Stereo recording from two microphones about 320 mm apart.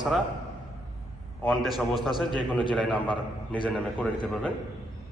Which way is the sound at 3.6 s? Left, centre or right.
Centre.